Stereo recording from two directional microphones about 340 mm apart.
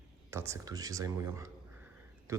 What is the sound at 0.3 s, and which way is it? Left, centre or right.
A man's voice, centre.